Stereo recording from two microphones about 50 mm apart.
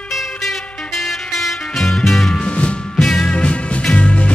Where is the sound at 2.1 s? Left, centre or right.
Centre.